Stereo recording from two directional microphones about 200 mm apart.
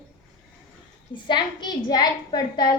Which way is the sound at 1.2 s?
20° left (ahead or behind).